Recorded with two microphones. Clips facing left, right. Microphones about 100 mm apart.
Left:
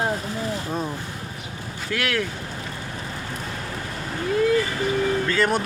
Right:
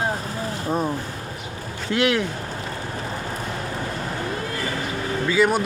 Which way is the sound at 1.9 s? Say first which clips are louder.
Right 5 dB; 20° right (ahead or behind).